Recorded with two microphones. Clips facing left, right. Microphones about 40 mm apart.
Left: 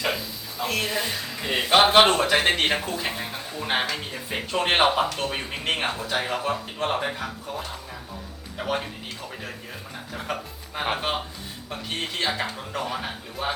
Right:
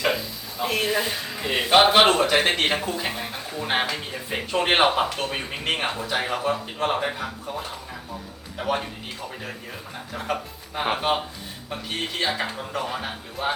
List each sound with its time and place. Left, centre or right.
0.0 s speech: centre
5.0 s speech: centre
5.3 s speech: centre
10.1 s speech: centre
12.2 s speech: centre